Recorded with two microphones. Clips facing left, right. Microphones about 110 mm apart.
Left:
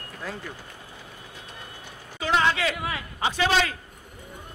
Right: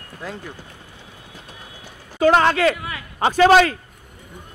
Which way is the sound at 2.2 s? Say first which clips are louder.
Right 8 dB; 50° right (ahead or behind).